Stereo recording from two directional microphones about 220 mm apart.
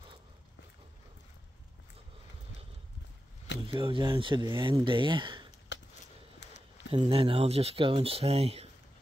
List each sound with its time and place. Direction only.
3.6 s speech: 20° right (ahead or behind)
5.7 s a sound: 55° left (ahead or behind)
6.9 s speech: 25° right (ahead or behind)